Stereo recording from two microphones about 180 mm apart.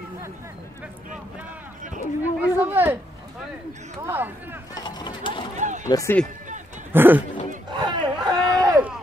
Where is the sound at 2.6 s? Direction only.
10° right (ahead or behind).